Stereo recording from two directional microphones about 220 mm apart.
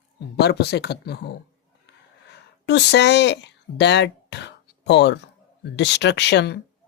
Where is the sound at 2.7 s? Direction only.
50° left (ahead or behind).